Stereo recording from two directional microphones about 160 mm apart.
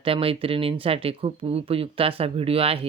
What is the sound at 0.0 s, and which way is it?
Speech, 35° right (ahead or behind).